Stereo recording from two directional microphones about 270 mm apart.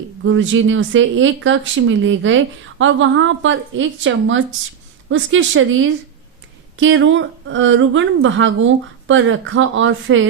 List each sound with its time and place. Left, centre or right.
0.2 s speech: right